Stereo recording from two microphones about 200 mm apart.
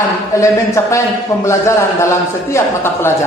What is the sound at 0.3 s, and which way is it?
A man's voice, 15° left (ahead or behind).